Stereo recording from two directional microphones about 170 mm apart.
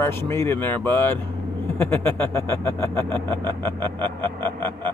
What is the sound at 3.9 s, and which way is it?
Speech, 10° left (ahead or behind).